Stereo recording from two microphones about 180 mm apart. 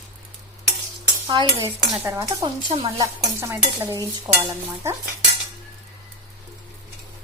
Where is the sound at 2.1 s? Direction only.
15° right (ahead or behind).